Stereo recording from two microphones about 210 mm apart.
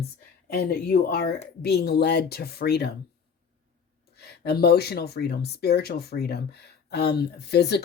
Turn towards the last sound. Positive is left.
turn(degrees=50)  # may be behind; listen again after turning